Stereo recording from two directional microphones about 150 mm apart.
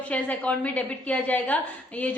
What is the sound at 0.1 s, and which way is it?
A woman's voice, 10° left (ahead or behind).